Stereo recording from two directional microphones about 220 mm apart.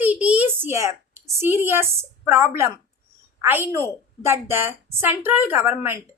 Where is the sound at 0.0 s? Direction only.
5° right (ahead or behind).